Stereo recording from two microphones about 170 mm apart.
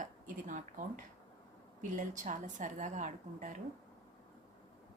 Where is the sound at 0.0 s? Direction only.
50° right (ahead or behind).